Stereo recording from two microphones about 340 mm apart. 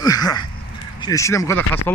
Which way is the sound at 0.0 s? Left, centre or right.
Centre.